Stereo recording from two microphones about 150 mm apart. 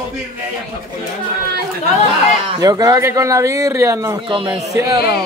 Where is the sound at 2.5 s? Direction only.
25° right (ahead or behind).